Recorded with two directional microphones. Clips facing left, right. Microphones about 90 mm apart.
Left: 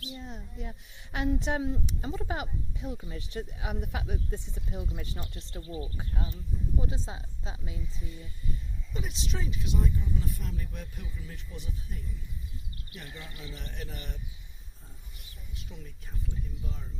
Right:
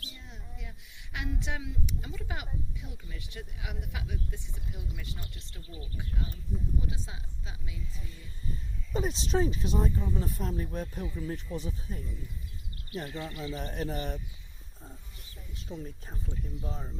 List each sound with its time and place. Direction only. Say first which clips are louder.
0.1 s a woman's voice: left 8 dB; 35° left (ahead or behind)
8.9 s speech: right 8 dB; 35° right (ahead or behind)
13.1 s speech: right 7 dB; 35° right (ahead or behind)
15.5 s speech: right 8 dB; 35° right (ahead or behind)